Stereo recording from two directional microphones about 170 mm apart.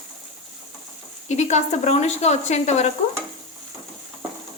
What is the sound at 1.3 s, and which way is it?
Speech, 40° left (ahead or behind).